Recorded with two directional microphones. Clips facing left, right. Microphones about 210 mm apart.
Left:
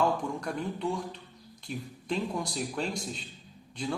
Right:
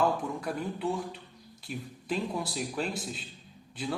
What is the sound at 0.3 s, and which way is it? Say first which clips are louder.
A man's voice: even; 5° right (ahead or behind).